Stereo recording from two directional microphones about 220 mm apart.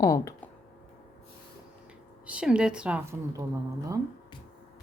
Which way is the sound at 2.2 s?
5° right (ahead or behind).